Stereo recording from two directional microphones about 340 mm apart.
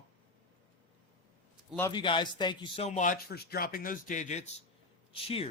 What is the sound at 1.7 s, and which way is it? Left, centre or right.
A man's voice, centre.